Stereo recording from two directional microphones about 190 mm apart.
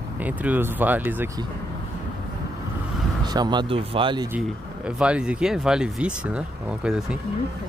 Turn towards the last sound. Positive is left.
turn(degrees=-5)  # may be behind; listen again after turning